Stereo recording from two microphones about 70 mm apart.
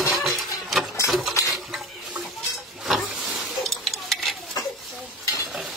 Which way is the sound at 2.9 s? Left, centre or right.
Centre.